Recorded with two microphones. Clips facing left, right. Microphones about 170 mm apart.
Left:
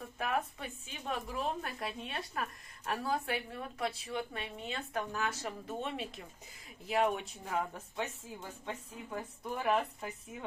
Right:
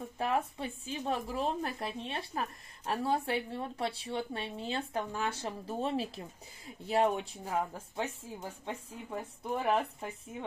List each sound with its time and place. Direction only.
0.6 s a woman's voice: 30° right (ahead or behind)